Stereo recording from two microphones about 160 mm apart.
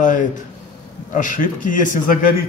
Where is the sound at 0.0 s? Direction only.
55° left (ahead or behind).